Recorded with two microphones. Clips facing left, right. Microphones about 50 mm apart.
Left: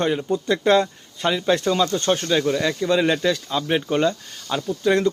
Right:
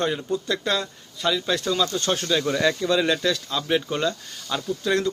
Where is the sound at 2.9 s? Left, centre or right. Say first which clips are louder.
Left 2 dB; centre.